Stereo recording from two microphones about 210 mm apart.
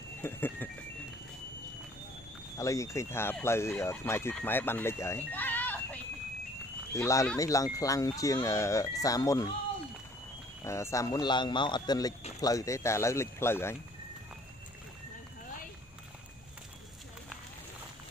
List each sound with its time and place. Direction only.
0.2 s speech: 10° left (ahead or behind)
2.5 s speech: 15° left (ahead or behind)
10.6 s speech: 15° left (ahead or behind)